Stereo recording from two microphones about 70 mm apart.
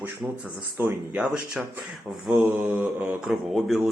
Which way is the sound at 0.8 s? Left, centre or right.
Right.